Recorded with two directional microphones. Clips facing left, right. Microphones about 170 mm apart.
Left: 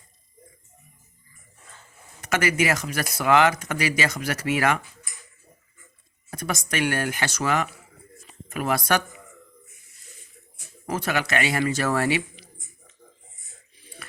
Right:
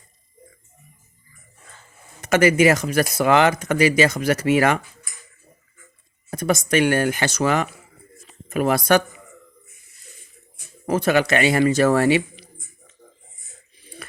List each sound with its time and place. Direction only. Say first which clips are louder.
2.2 s speech: right 8 dB; 25° right (ahead or behind)
6.3 s speech: right 9 dB; 25° right (ahead or behind)
10.8 s speech: right 8 dB; 25° right (ahead or behind)